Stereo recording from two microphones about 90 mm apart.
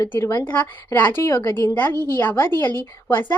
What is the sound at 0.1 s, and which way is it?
A woman's voice, 30° left (ahead or behind).